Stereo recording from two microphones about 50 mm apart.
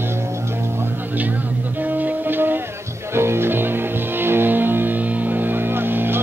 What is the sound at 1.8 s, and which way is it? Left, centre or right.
Music, right.